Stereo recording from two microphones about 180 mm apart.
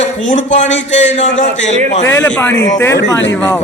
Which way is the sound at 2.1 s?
10° left (ahead or behind).